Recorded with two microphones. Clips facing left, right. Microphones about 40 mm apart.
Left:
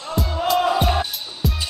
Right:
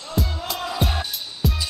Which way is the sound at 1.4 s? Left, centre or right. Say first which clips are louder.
Even; centre.